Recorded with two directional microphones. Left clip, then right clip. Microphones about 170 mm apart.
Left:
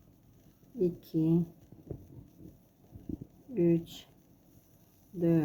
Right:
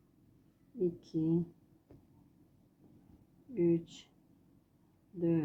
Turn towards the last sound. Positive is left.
turn(degrees=20)  # may be behind; listen again after turning